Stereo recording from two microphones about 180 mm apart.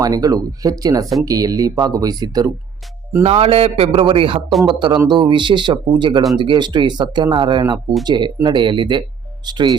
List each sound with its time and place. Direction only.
0.0 s a man's voice: 20° right (ahead or behind)
3.2 s a man's voice: 35° right (ahead or behind)